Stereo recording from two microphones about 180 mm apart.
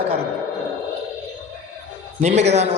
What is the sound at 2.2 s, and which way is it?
Speech, 35° right (ahead or behind).